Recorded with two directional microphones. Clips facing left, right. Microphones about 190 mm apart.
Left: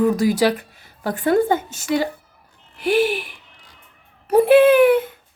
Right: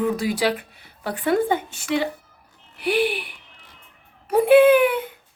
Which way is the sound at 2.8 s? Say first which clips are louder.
Left 3 dB; 40° left (ahead or behind).